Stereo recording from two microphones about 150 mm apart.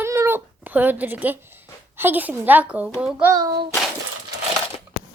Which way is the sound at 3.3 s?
25° right (ahead or behind).